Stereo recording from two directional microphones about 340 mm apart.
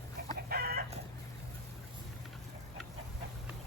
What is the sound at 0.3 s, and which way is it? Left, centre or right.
Chicken, right.